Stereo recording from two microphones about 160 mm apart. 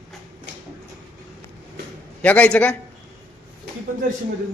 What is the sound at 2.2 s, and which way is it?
Speech, 10° left (ahead or behind).